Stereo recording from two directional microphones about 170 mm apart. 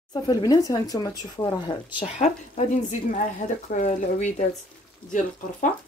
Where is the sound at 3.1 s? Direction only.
45° left (ahead or behind).